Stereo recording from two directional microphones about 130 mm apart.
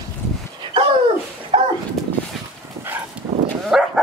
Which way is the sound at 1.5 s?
45° right (ahead or behind).